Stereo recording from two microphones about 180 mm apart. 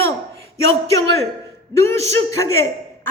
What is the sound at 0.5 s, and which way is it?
A woman's voice, 15° left (ahead or behind).